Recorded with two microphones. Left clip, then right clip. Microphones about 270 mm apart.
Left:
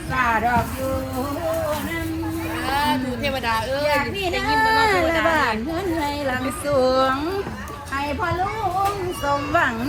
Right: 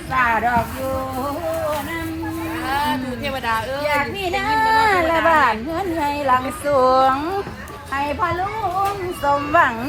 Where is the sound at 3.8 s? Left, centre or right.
Centre.